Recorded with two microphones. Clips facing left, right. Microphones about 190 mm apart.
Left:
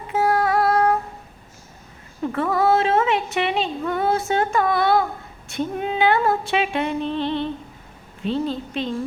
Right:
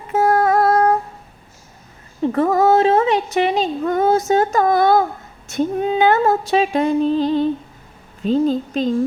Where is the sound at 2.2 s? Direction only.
40° right (ahead or behind).